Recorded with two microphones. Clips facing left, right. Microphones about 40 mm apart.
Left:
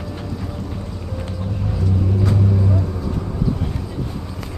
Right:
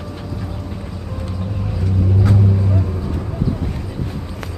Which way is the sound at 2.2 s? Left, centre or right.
Centre.